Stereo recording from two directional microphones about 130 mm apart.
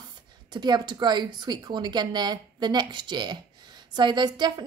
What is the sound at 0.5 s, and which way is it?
Speech, 35° right (ahead or behind).